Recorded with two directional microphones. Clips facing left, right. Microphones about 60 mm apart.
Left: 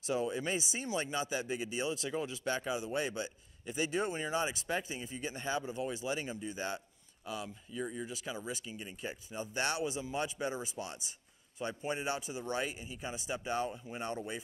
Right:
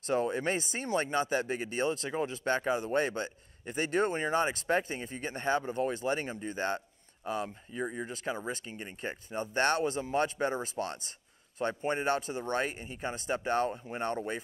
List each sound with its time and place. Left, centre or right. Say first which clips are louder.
0.0 s speech: right 4 dB; right
8.1 s speech: right 5 dB; right